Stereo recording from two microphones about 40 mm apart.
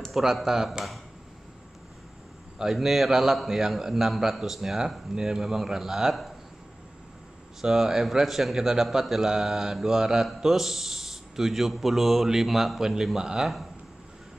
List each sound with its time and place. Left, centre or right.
0.1 s speech: centre
2.6 s speech: centre
7.6 s a man's voice: centre